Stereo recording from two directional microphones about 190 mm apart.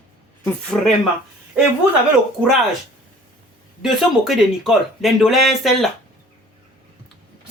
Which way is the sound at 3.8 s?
Centre (ahead or behind).